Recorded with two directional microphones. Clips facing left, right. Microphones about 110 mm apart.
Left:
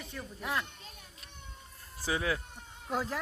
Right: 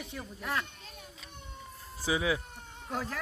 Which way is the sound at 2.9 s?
25° left (ahead or behind).